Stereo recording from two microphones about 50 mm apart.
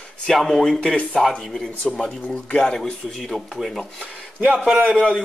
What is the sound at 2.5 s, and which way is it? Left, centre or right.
Speech, centre.